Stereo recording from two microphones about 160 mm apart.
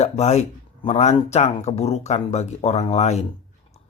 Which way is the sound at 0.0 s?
45° left (ahead or behind).